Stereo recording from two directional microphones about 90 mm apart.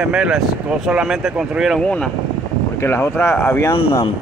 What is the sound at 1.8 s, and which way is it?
Speech, 10° left (ahead or behind).